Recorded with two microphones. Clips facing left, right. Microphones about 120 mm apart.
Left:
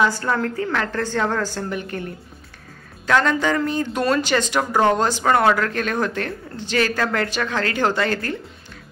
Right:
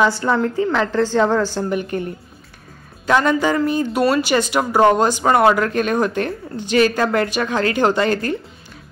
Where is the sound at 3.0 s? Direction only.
15° right (ahead or behind).